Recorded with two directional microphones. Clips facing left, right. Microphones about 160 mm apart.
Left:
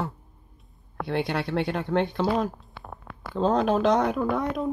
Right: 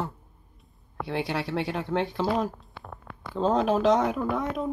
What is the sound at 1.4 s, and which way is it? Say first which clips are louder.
Speech: left 2 dB; 5° right (ahead or behind).